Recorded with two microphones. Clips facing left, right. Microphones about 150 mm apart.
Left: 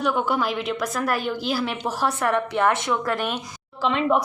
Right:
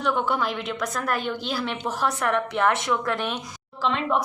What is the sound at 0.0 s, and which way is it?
A woman's voice, 5° left (ahead or behind).